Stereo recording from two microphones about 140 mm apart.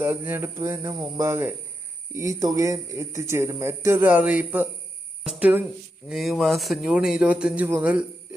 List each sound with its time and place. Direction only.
0.0 s a man's voice: 15° right (ahead or behind)